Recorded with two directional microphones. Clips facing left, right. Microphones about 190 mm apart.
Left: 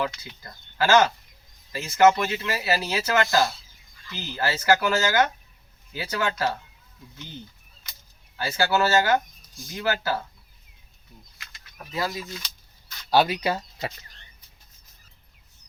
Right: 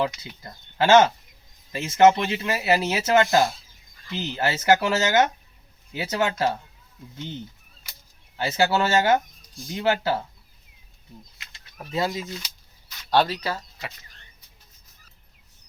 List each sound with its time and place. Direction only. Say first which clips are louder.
0.0 s speech: right 3 dB; 25° right (ahead or behind)
8.4 s speech: right 1 dB; 20° right (ahead or behind)
11.3 s bird: even; 25° right (ahead or behind)
13.1 s speech: left 1 dB; 10° left (ahead or behind)